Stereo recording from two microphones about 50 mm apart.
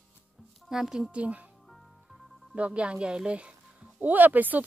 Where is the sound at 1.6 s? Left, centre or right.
Centre.